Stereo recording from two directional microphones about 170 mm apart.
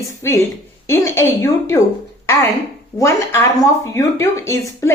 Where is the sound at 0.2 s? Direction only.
15° left (ahead or behind).